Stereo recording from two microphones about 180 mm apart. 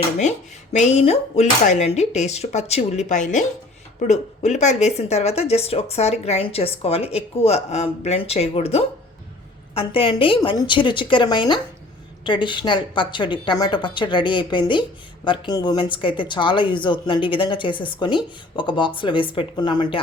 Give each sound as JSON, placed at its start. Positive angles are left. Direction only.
{"t": 0.2, "sound": "a woman's voice", "side_deg": 40}